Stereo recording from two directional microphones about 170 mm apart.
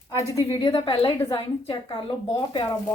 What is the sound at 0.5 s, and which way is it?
A woman's voice, 25° left (ahead or behind).